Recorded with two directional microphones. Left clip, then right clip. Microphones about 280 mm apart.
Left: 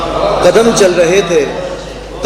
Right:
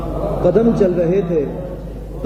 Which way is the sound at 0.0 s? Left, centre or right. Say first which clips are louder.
Left 10 dB; centre.